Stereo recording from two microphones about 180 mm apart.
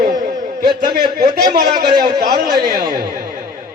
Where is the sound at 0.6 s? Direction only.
25° right (ahead or behind).